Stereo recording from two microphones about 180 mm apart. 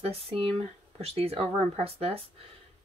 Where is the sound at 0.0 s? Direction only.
35° right (ahead or behind).